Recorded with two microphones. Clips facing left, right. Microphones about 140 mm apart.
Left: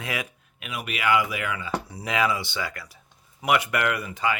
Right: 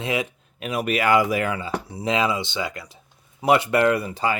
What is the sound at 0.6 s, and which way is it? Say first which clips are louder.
Speech: right 6 dB; 40° right (ahead or behind).